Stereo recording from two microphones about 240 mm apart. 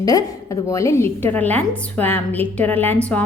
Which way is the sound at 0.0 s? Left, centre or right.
Centre.